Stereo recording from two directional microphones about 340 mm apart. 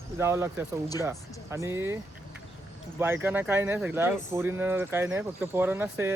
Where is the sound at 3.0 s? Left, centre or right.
Centre.